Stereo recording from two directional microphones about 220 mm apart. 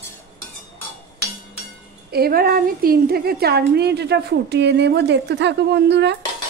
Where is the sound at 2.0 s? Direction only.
45° right (ahead or behind).